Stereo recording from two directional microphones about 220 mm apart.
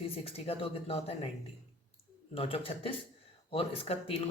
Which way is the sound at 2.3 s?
25° left (ahead or behind).